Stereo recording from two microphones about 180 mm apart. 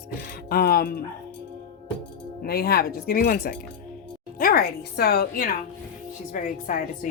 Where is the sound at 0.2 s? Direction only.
55° left (ahead or behind).